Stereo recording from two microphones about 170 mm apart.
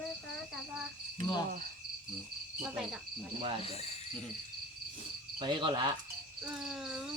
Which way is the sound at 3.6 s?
40° left (ahead or behind).